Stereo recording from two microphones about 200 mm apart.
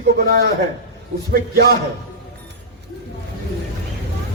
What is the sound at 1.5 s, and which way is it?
Speech, 50° right (ahead or behind).